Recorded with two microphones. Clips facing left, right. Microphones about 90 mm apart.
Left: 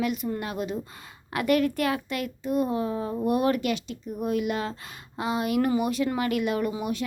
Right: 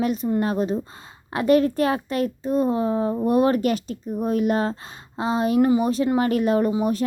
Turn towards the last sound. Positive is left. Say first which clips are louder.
# right 7 dB
turn(degrees=-35)  # may be behind; listen again after turning